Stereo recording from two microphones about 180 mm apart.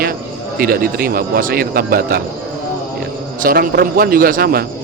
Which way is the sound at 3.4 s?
55° right (ahead or behind).